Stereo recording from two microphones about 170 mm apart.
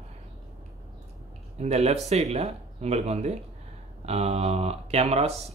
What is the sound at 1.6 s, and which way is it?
Speech, 40° right (ahead or behind).